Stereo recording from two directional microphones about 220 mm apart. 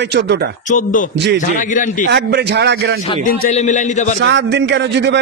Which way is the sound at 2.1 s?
50° right (ahead or behind).